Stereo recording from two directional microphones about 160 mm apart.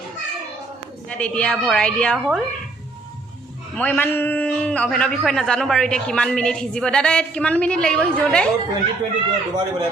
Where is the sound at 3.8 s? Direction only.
10° left (ahead or behind).